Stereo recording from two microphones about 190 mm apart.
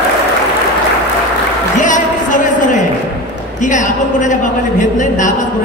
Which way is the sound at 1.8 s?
40° left (ahead or behind).